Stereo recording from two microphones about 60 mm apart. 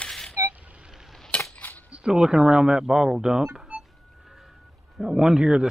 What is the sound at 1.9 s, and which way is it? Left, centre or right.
Speech, centre.